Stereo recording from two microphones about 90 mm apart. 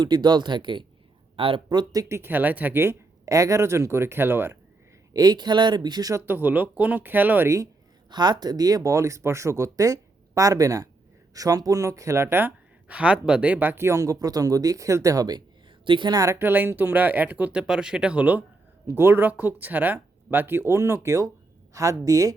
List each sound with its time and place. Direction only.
0.0 s speech: 55° right (ahead or behind)
1.4 s speech: 90° right
1.7 s speech: 50° right (ahead or behind); by 4.5 s 25° right (ahead or behind)
5.1 s speech: 45° right (ahead or behind)
6.2 s speech: 20° right (ahead or behind)
8.1 s speech: 55° right (ahead or behind)
15.8 s a woman's voice: 65° right (ahead or behind)
16.1 s speech: 35° right (ahead or behind)
16.4 s speech: 20° right (ahead or behind); by 22.4 s 40° right (ahead or behind)